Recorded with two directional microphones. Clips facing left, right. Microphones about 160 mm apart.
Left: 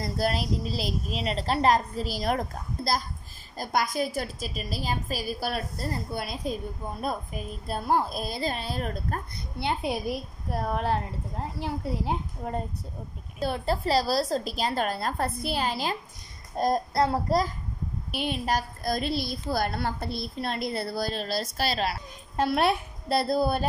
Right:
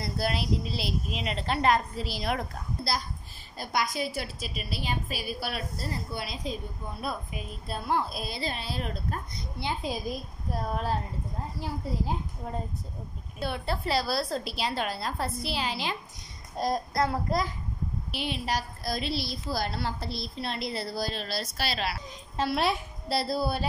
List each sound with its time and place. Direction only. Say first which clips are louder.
0.0 s a woman's voice: left 3 dB; 40° left (ahead or behind)
9.6 s a child's voice: left 4 dB; 65° left (ahead or behind)
13.4 s a woman's voice: left 4 dB; 40° left (ahead or behind)
16.9 s a woman's voice: left 3 dB; 30° left (ahead or behind)
18.1 s a woman's voice: left 4 dB; 50° left (ahead or behind)